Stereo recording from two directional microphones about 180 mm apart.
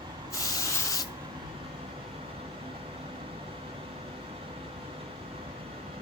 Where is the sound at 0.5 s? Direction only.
20° left (ahead or behind).